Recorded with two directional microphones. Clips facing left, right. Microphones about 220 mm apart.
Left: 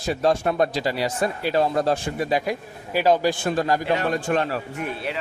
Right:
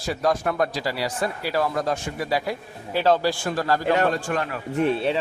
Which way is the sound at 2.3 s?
20° left (ahead or behind).